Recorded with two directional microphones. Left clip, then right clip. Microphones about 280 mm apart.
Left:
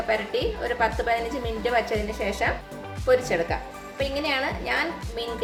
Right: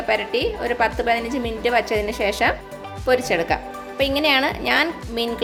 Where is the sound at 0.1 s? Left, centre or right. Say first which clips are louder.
Right 6 dB; right.